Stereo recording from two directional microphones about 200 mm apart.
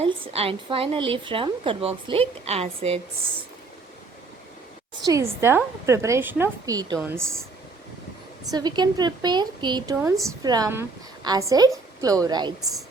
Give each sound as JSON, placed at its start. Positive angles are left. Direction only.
{"t": 0.0, "sound": "a woman's voice", "side_deg": -30}
{"t": 5.0, "sound": "a woman's voice", "side_deg": -15}
{"t": 8.4, "sound": "a woman's voice", "side_deg": -20}